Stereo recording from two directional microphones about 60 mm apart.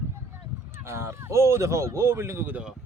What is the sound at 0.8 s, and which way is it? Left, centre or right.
Speech, right.